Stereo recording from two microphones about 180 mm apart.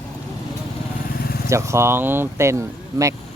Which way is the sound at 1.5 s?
15° right (ahead or behind).